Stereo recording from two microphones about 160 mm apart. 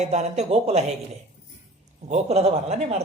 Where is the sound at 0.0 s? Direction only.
45° right (ahead or behind).